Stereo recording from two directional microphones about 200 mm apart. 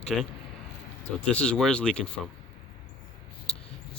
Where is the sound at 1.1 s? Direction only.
5° left (ahead or behind).